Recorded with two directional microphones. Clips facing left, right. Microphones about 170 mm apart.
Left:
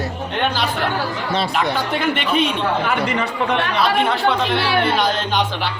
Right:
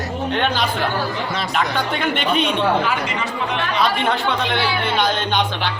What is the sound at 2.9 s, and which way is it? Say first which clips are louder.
Speech: left 3 dB; 55° left (ahead or behind).